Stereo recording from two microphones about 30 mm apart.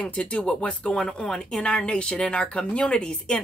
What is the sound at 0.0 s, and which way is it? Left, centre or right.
Speech, left.